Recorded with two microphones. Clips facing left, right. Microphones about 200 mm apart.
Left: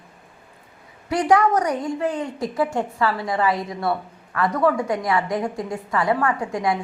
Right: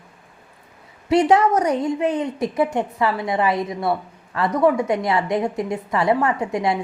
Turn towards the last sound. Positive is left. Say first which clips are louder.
# right 1 dB
turn(degrees=-25)  # may be behind; listen again after turning